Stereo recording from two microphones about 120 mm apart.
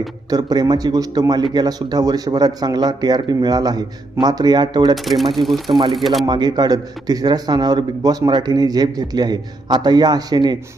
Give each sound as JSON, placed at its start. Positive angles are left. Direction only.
{"t": 0.3, "sound": "a man's voice", "side_deg": -35}
{"t": 5.0, "sound": "speech", "side_deg": 0}
{"t": 6.2, "sound": "a man's voice", "side_deg": -35}